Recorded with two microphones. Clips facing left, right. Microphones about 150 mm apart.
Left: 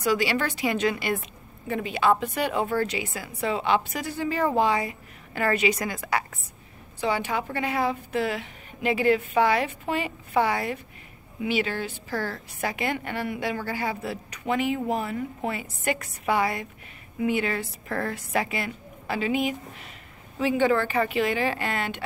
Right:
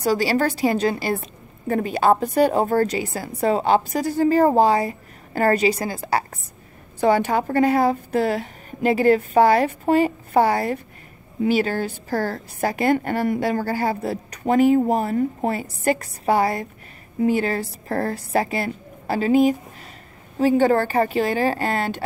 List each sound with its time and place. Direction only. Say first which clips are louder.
0.0 s a woman's voice: right 5 dB; 35° right (ahead or behind)
7.0 s a woman's voice: right 8 dB; 45° right (ahead or behind)